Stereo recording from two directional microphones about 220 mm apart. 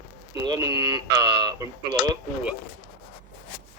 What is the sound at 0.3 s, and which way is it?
Speech, 15° right (ahead or behind).